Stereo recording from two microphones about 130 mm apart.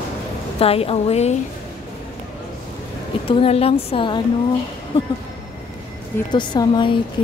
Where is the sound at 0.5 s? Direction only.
50° left (ahead or behind).